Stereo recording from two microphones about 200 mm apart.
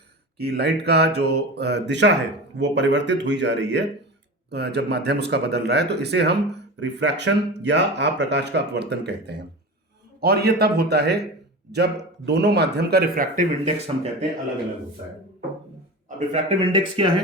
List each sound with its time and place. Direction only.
0.3 s a man's voice: 55° right (ahead or behind); by 14.1 s 30° right (ahead or behind)
16.0 s speech: 35° right (ahead or behind)